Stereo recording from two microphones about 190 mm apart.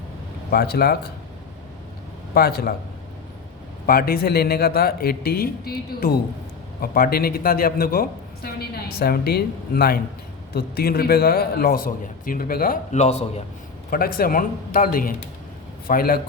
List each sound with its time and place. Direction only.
0.5 s speech: 55° left (ahead or behind)
2.3 s a woman's voice: 55° left (ahead or behind)
3.8 s a woman's voice: 50° left (ahead or behind); by 13.4 s 35° left (ahead or behind)
13.9 s a woman's voice: 50° left (ahead or behind)